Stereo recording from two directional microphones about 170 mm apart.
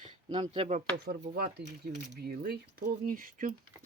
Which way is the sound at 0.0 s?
35° right (ahead or behind).